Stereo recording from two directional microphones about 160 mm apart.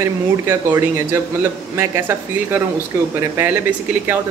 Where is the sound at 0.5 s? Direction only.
15° right (ahead or behind).